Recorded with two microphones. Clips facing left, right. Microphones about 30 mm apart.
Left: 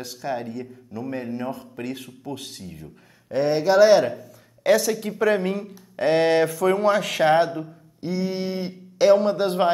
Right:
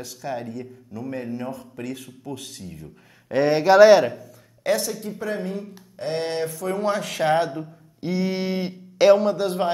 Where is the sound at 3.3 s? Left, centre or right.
Right.